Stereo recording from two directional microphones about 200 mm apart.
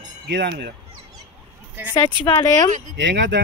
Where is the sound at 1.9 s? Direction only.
20° left (ahead or behind).